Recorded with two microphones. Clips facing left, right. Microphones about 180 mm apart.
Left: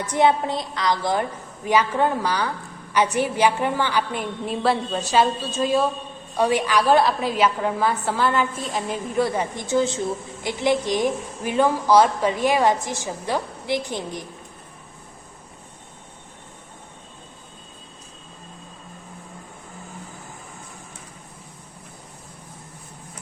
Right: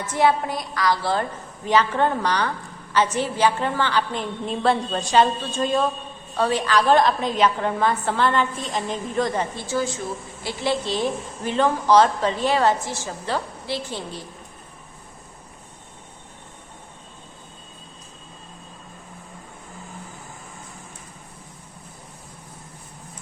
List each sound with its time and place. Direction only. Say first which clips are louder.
0.0 s a woman's voice: left 1 dB; 20° left (ahead or behind)